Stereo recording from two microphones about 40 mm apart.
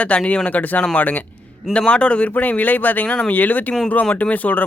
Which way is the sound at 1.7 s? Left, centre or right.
Left.